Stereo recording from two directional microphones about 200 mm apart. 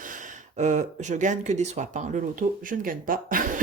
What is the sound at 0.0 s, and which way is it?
Speech, 40° right (ahead or behind).